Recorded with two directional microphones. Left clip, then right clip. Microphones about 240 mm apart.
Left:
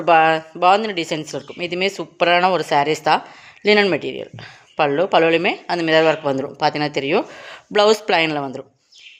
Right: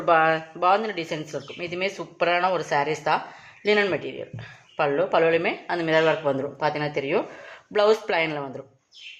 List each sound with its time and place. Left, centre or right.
0.0 s speech: left